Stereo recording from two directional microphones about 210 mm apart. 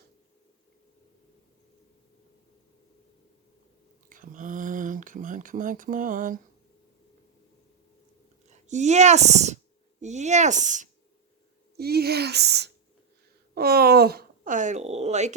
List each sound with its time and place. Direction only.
4.1 s a sound: 40° right (ahead or behind)
8.4 s speech: 35° right (ahead or behind)
11.8 s speech: 50° right (ahead or behind); by 15.4 s 35° right (ahead or behind)